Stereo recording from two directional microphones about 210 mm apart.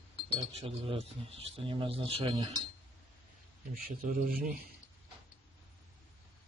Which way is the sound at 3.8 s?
45° right (ahead or behind).